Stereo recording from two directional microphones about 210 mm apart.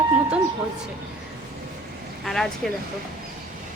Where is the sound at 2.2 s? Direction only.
Centre (ahead or behind).